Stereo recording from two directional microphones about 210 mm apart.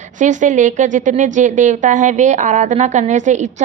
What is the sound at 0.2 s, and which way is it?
A woman's voice, 35° right (ahead or behind).